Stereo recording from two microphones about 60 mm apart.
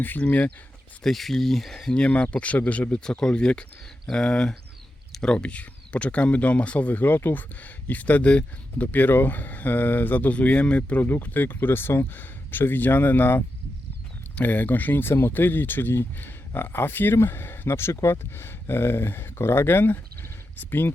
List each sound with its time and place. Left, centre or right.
0.0 s speech: left
1.0 s speech: centre; by 20.9 s left